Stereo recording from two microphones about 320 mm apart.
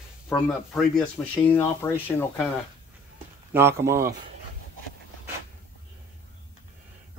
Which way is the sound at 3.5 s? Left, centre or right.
Centre.